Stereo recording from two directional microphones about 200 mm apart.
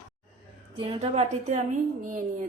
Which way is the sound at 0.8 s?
30° right (ahead or behind).